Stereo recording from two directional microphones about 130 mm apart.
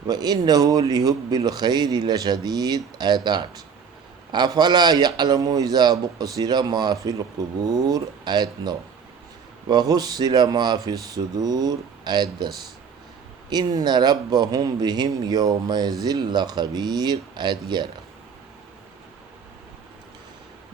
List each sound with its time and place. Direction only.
0.1 s a man's voice: 30° right (ahead or behind)
13.5 s a man's voice: 30° right (ahead or behind)